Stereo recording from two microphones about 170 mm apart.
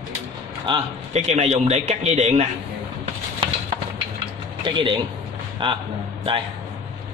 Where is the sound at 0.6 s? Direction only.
35° right (ahead or behind).